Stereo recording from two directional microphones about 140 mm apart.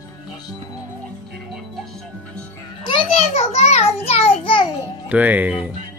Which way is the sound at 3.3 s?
50° left (ahead or behind).